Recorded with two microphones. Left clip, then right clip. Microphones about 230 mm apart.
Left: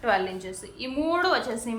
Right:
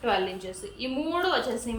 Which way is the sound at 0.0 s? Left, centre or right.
Centre.